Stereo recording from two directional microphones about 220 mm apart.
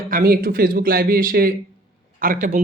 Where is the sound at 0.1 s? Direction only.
40° right (ahead or behind).